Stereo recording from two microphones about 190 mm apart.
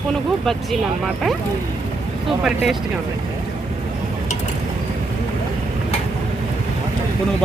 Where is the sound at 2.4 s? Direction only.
Centre (ahead or behind).